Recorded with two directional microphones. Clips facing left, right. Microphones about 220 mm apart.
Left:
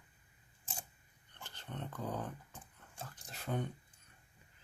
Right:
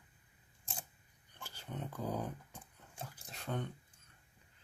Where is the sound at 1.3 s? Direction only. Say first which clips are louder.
Right 1 dB; 10° right (ahead or behind).